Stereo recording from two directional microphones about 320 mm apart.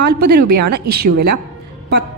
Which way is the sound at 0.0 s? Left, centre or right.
Right.